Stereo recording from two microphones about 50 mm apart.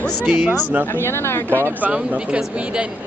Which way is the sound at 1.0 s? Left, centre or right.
Left.